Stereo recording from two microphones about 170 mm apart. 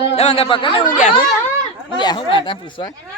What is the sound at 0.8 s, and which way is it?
Speech, 50° left (ahead or behind).